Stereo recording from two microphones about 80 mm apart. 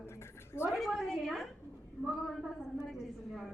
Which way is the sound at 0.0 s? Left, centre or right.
Left.